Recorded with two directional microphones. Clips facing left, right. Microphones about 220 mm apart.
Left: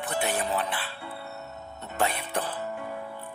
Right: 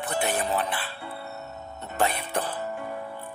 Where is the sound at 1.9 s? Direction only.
40° right (ahead or behind).